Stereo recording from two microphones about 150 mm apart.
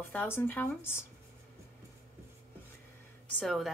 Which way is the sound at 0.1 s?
15° left (ahead or behind).